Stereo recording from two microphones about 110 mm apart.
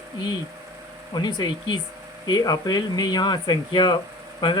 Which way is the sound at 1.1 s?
40° left (ahead or behind).